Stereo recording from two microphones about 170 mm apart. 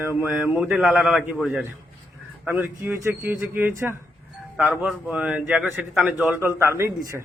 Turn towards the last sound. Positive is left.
turn(degrees=-15)  # may be behind; listen again after turning